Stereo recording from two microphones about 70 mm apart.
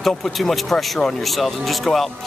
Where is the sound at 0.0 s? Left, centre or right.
Centre.